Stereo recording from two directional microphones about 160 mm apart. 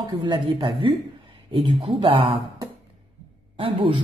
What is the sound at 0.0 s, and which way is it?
A man's voice, 30° right (ahead or behind).